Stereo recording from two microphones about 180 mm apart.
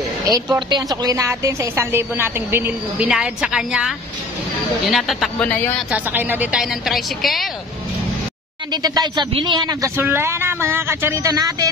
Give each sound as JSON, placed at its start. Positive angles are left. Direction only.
{"t": 0.3, "sound": "a woman's voice", "side_deg": -25}
{"t": 4.9, "sound": "speech", "side_deg": 0}
{"t": 5.9, "sound": "a woman's voice", "side_deg": -10}
{"t": 8.8, "sound": "a man's voice", "side_deg": -25}